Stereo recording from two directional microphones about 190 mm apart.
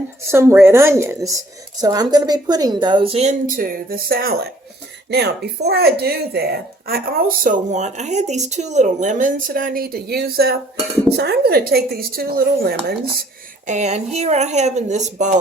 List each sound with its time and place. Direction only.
0.3 s a woman's voice: 15° right (ahead or behind); by 12.7 s 50° right (ahead or behind)
13.7 s speech: 35° right (ahead or behind)